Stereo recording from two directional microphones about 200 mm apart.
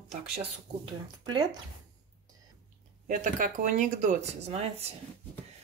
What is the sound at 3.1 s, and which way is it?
Speech, 40° right (ahead or behind).